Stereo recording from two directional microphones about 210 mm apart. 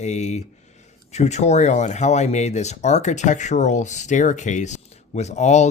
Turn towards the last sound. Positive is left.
turn(degrees=35)  # may be behind; listen again after turning